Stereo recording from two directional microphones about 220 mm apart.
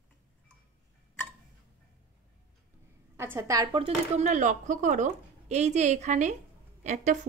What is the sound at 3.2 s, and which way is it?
Speech, 10° right (ahead or behind).